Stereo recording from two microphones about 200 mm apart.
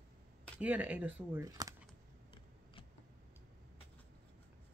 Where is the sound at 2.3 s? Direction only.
25° left (ahead or behind).